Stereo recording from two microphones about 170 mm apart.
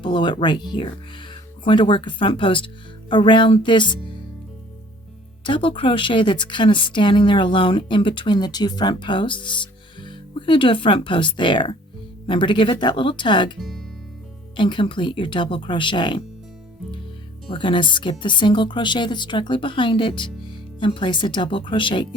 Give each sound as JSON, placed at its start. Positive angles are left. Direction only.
{"t": 0.0, "sound": "speech", "side_deg": 30}
{"t": 5.4, "sound": "speech", "side_deg": 30}
{"t": 13.6, "sound": "speech", "side_deg": 0}
{"t": 14.5, "sound": "speech", "side_deg": 30}
{"t": 17.5, "sound": "speech", "side_deg": 30}